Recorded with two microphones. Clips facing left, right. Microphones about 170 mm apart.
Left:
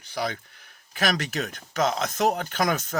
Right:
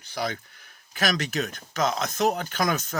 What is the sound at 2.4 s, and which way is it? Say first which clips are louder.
Speech: left 1 dB; 40° right (ahead or behind).